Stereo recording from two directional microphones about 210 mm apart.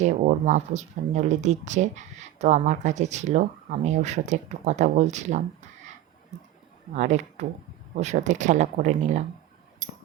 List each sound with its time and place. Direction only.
0.0 s speech: 35° right (ahead or behind)
6.9 s speech: 35° right (ahead or behind)